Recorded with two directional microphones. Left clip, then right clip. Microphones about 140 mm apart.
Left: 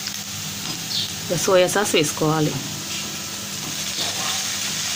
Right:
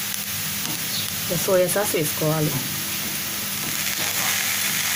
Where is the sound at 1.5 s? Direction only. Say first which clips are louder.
Left 3 dB; 55° left (ahead or behind).